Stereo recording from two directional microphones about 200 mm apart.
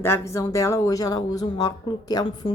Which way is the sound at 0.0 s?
15° left (ahead or behind).